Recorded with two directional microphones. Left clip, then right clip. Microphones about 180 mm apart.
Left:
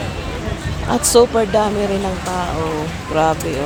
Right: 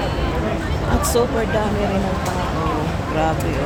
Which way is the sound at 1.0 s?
30° left (ahead or behind).